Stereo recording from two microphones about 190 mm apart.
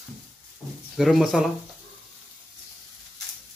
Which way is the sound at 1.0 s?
Centre (ahead or behind).